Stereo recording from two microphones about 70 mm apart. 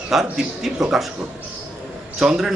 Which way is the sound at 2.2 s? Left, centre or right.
Centre.